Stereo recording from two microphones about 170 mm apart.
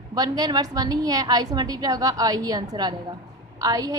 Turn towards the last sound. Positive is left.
turn(degrees=-20)  # may be behind; listen again after turning